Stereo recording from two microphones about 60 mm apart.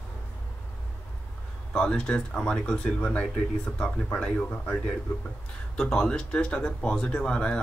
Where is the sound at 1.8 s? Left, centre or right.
Centre.